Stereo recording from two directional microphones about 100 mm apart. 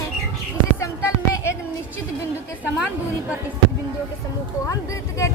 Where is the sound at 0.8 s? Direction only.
30° left (ahead or behind).